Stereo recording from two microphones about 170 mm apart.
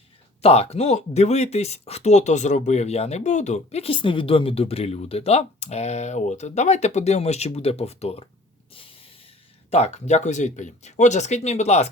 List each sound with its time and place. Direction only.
0.4 s speech: 35° left (ahead or behind)
9.6 s speech: 40° left (ahead or behind)